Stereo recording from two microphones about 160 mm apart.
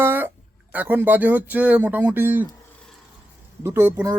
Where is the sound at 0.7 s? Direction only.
10° right (ahead or behind).